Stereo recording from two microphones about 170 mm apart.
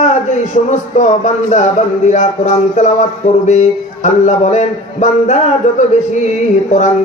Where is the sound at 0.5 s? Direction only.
45° left (ahead or behind).